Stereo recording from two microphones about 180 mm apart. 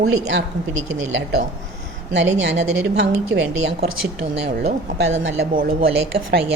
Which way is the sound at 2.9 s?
80° right.